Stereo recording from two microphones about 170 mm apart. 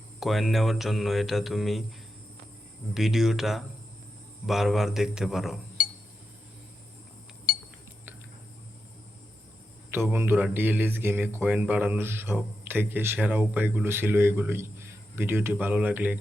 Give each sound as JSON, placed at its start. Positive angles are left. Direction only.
{"t": 0.2, "sound": "speech", "side_deg": 0}
{"t": 2.9, "sound": "speech", "side_deg": 0}
{"t": 7.5, "sound": "cutlery", "side_deg": 55}
{"t": 9.9, "sound": "speech", "side_deg": -15}